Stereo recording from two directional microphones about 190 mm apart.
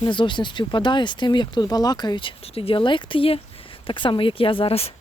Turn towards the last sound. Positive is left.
turn(degrees=30)  # may be behind; listen again after turning